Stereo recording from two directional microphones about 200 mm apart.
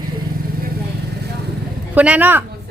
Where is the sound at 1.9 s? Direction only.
5° right (ahead or behind).